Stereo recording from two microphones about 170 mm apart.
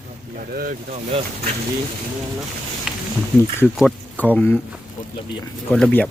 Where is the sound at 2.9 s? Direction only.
5° right (ahead or behind).